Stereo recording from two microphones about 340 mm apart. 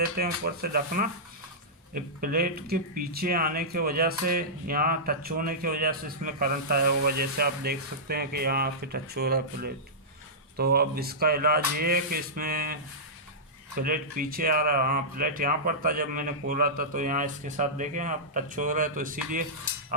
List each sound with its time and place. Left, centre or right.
0.2 s speech: right
13.7 s speech: right